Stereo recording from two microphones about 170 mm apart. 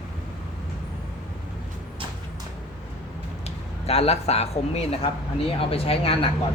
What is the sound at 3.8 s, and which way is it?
A man's voice, 35° left (ahead or behind).